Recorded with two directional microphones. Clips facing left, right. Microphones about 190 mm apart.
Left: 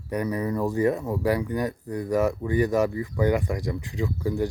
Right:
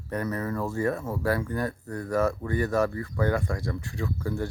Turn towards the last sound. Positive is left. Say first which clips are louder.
# left 4 dB
turn(degrees=15)  # may be behind; listen again after turning